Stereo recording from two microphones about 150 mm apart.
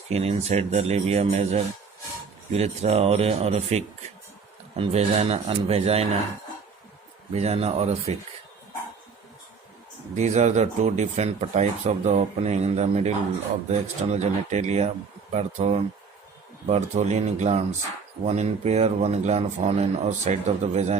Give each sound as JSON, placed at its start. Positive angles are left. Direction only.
{"t": 0.1, "sound": "speech", "side_deg": -45}
{"t": 7.3, "sound": "speech", "side_deg": -45}
{"t": 10.2, "sound": "speech", "side_deg": -50}